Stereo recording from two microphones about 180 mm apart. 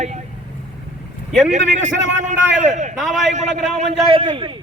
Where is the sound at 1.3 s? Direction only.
40° right (ahead or behind).